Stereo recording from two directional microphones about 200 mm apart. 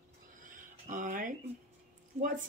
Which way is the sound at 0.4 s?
40° right (ahead or behind).